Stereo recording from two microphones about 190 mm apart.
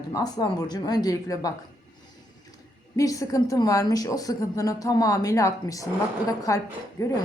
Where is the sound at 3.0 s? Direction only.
15° left (ahead or behind).